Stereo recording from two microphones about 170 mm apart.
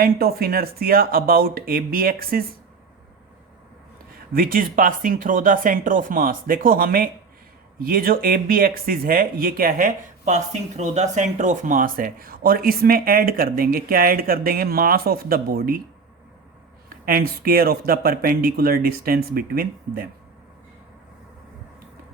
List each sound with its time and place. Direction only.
0.0 s speech: 65° right (ahead or behind)
4.3 s speech: 60° right (ahead or behind)
16.9 s speech: 60° right (ahead or behind)